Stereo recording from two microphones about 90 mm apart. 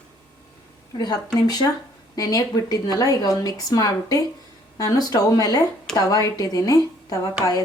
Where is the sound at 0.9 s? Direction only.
50° left (ahead or behind).